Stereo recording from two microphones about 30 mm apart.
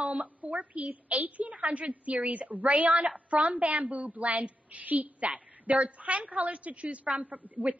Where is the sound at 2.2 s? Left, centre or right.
Right.